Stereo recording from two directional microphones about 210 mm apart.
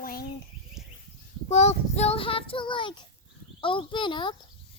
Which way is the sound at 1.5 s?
30° left (ahead or behind).